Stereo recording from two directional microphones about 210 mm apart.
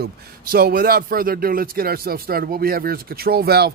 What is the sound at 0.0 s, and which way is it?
A man's voice, 45° right (ahead or behind).